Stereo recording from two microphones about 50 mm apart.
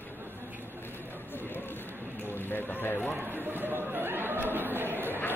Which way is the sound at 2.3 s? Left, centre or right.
Left.